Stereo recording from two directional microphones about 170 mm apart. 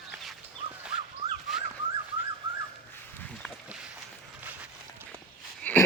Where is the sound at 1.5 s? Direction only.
Centre (ahead or behind).